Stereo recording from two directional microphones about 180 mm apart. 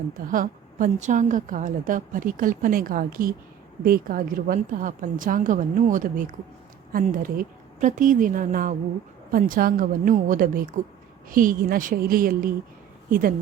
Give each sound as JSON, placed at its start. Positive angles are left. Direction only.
{"t": 0.3, "sound": "a woman's voice", "side_deg": -45}